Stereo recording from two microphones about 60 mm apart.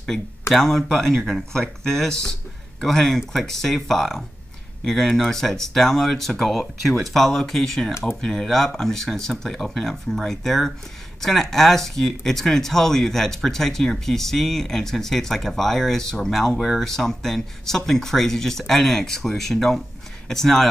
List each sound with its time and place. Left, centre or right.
0.5 s speech: centre